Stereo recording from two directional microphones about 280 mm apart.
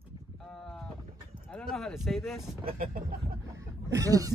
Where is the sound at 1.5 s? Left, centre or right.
Centre.